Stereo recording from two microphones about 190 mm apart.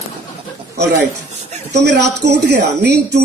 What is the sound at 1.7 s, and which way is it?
Speech, 60° right (ahead or behind).